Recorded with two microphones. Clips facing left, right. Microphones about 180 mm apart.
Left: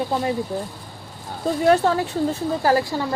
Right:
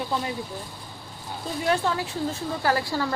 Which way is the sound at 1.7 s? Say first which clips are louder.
Left 7 dB; 45° left (ahead or behind).